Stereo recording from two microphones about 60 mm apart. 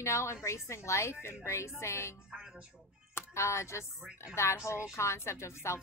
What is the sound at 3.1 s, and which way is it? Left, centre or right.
Speech, left.